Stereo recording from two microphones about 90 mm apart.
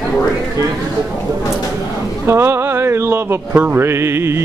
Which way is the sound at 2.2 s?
30° right (ahead or behind).